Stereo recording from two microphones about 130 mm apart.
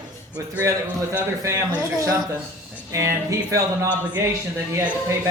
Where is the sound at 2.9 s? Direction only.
20° right (ahead or behind).